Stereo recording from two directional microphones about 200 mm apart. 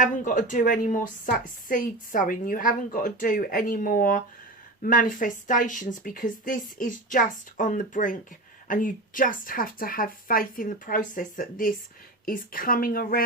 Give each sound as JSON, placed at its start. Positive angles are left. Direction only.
{"t": 0.0, "sound": "a woman's voice", "side_deg": 40}